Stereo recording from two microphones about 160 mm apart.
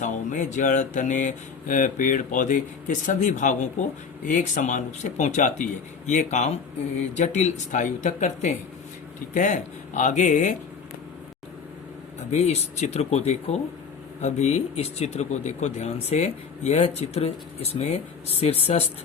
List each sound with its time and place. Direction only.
0.0 s speech: 50° left (ahead or behind)
12.3 s speech: 45° left (ahead or behind)